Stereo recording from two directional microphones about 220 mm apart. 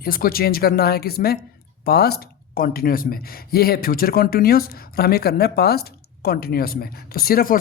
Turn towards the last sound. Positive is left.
turn(degrees=40)  # may be behind; listen again after turning